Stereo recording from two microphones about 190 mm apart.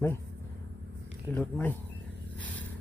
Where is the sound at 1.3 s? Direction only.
10° left (ahead or behind).